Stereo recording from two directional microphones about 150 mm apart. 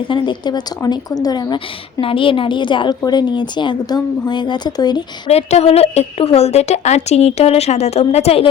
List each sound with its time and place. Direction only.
0.1 s a woman's voice: 30° left (ahead or behind)
5.3 s speech: 45° left (ahead or behind)